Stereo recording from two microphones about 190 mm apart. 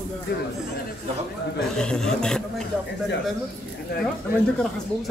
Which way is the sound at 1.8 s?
5° left (ahead or behind).